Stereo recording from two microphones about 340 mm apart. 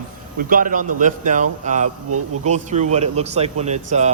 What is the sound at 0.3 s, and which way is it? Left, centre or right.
Speech, right.